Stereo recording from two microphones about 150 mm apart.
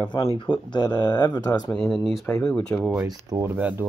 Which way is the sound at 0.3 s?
35° left (ahead or behind).